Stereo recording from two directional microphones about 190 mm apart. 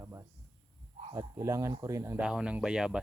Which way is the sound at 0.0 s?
15° right (ahead or behind).